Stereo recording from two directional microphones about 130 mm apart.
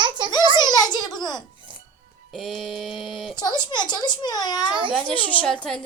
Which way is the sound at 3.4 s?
35° left (ahead or behind).